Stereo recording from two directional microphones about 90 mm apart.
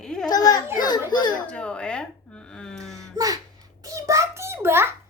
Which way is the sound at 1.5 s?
15° left (ahead or behind).